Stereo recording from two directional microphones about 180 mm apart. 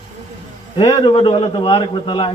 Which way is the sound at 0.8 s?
30° left (ahead or behind).